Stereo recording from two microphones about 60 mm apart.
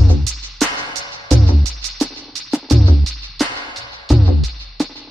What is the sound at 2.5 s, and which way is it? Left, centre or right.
Music, centre.